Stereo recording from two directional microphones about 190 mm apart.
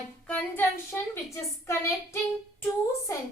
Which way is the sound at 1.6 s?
15° left (ahead or behind).